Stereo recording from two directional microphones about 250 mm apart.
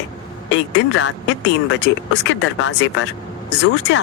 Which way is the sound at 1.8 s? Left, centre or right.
Left.